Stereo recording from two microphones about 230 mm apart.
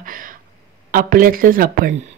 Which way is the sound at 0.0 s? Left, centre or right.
Right.